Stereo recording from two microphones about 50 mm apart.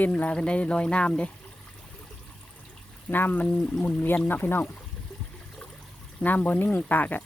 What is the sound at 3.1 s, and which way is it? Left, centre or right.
Speech, left.